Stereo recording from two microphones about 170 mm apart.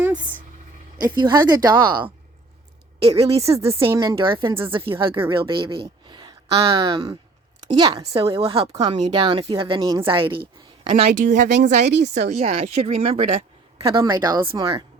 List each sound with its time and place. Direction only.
0.0 s a sound: 10° right (ahead or behind)
1.1 s speech: 25° right (ahead or behind)
3.2 s speech: 35° right (ahead or behind)
3.5 s speech: 15° right (ahead or behind)
4.1 s a woman's voice: 30° right (ahead or behind)
8.6 s speech: 20° right (ahead or behind)
10.8 s speech: 35° right (ahead or behind)
13.9 s speech: 25° right (ahead or behind)